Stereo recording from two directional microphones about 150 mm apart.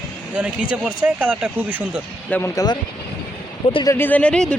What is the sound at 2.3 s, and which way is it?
Speech, 10° left (ahead or behind).